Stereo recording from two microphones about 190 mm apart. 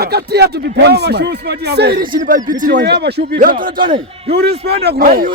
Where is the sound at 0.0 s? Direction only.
60° right (ahead or behind).